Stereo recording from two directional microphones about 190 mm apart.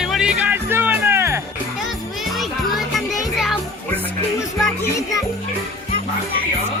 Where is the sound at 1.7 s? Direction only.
Centre (ahead or behind).